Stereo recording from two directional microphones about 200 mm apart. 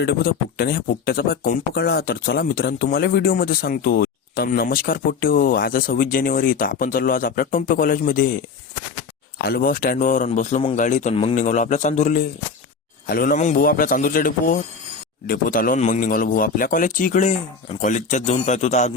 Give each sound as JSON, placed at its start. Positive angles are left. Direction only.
{"t": 0.0, "sound": "speech", "side_deg": 50}
{"t": 9.4, "sound": "a man's voice", "side_deg": 50}